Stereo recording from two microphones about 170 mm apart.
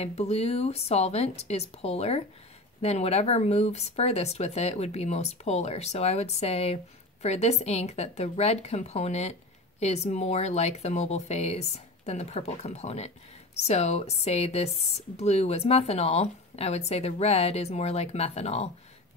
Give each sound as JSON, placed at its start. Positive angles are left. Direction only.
{"t": 0.0, "sound": "speech", "side_deg": 35}